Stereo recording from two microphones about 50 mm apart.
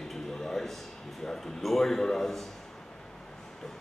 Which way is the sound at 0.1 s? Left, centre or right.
Centre.